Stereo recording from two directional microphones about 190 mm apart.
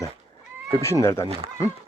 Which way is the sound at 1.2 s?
30° right (ahead or behind).